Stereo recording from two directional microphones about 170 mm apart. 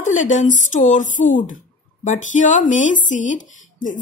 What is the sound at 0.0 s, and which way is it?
Speech, 50° left (ahead or behind).